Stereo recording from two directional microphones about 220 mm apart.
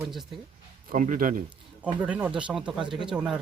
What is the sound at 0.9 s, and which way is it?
Speech, 40° right (ahead or behind).